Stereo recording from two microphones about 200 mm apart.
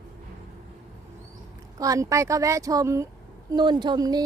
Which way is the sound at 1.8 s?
15° right (ahead or behind).